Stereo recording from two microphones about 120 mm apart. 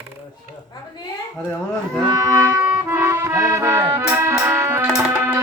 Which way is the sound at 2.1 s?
25° right (ahead or behind).